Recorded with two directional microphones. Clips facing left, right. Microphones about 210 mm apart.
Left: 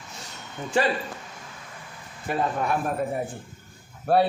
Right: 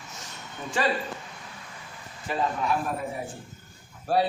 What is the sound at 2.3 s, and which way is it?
Speech, 55° left (ahead or behind).